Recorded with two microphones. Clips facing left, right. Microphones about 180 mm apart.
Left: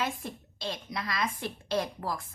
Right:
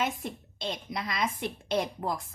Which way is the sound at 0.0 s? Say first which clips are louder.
Right 2 dB; 20° right (ahead or behind).